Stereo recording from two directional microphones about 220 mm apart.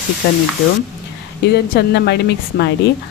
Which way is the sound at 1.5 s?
50° left (ahead or behind).